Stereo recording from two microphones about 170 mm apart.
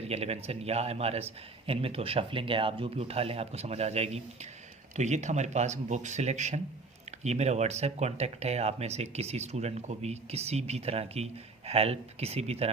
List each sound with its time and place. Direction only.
0.0 s speech: 35° right (ahead or behind)